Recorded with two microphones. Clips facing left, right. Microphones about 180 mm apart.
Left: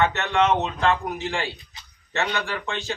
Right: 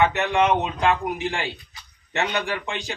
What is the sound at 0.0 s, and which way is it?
Speech, 15° right (ahead or behind).